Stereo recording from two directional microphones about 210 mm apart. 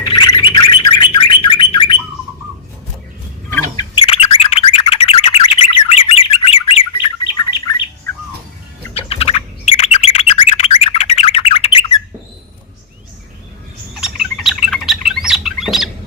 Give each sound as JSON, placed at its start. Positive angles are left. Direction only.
{"t": 0.1, "sound": "bird", "side_deg": 25}
{"t": 3.9, "sound": "chirp tone", "side_deg": 25}
{"t": 7.7, "sound": "bird", "side_deg": 20}
{"t": 13.9, "sound": "bird", "side_deg": 0}